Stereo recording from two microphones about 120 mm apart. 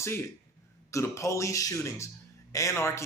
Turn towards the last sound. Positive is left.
turn(degrees=25)  # may be behind; listen again after turning